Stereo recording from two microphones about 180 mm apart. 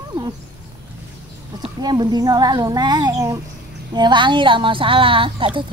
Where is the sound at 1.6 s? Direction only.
25° right (ahead or behind).